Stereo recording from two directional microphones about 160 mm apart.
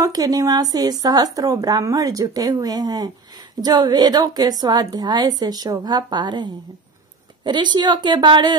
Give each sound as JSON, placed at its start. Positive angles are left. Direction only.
{"t": 0.0, "sound": "speech", "side_deg": -25}